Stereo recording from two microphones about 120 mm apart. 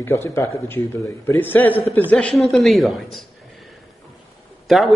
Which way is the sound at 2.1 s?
5° left (ahead or behind).